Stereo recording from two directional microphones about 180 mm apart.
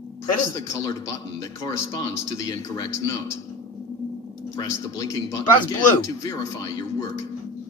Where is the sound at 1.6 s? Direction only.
20° left (ahead or behind).